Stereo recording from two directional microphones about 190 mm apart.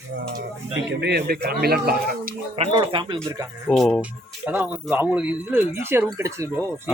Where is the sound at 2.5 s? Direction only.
25° right (ahead or behind).